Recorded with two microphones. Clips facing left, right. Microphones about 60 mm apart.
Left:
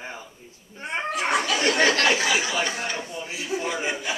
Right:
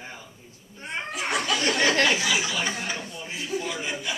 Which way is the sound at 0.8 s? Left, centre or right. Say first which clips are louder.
Left 5 dB; left.